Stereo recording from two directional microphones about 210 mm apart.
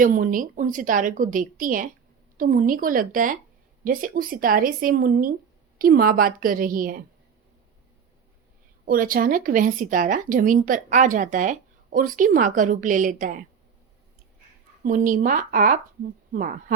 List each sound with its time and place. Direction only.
0.0 s speech: 40° right (ahead or behind)
8.9 s speech: 40° right (ahead or behind)
14.8 s speech: 40° right (ahead or behind)